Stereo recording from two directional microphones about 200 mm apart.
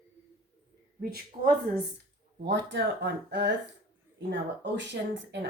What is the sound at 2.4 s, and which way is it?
Speech, 60° right (ahead or behind).